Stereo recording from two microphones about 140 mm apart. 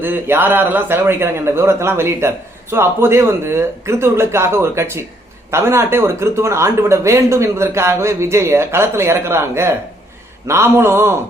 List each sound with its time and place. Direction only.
0.0 s a man's voice: 15° right (ahead or behind)